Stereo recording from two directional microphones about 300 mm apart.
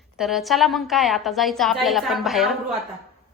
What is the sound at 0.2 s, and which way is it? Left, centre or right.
A woman's voice, centre.